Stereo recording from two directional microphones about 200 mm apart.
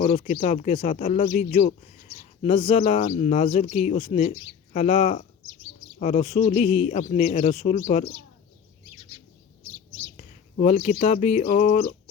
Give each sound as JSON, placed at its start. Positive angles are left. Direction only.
{"t": 0.0, "sound": "speech", "side_deg": 35}
{"t": 10.2, "sound": "speech", "side_deg": 35}